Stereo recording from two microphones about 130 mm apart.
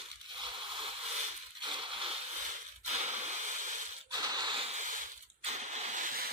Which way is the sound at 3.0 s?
60° right (ahead or behind).